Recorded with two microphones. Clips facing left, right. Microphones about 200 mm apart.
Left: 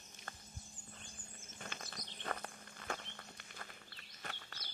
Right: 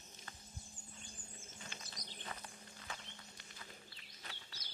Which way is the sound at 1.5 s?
55° left (ahead or behind).